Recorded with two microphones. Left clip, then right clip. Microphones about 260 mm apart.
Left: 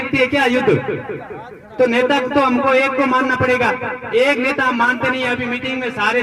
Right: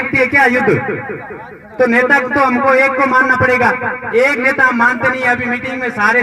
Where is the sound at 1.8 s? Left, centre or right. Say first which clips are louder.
Right 4 dB; left.